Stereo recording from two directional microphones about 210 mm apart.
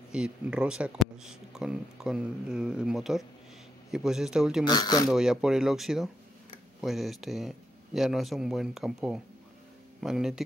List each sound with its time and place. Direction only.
0.1 s speech: 5° right (ahead or behind)
4.6 s speech: 20° left (ahead or behind)
5.1 s speech: 5° right (ahead or behind)